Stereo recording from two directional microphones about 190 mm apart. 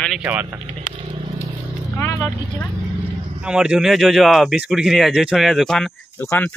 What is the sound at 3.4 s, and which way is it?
Speech, 5° right (ahead or behind).